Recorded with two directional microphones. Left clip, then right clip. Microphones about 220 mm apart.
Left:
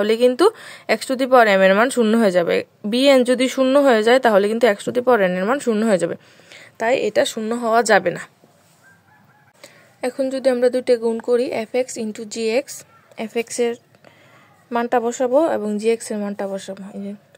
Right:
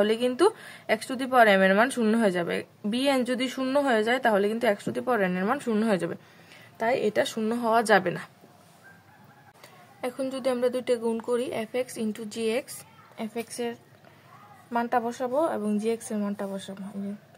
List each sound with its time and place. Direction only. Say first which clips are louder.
0.0 s speech: left 8 dB; 40° left (ahead or behind)
9.6 s a woman's voice: left 8 dB; 35° left (ahead or behind)